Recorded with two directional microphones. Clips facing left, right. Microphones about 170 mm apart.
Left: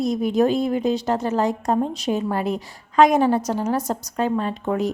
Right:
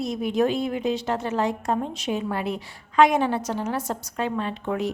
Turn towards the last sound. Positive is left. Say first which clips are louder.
# left 4 dB
turn(degrees=40)  # may be behind; listen again after turning